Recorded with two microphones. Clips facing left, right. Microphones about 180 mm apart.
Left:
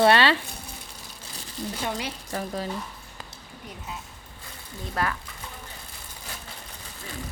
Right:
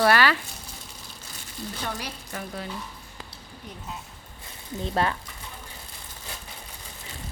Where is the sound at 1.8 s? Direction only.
15° left (ahead or behind).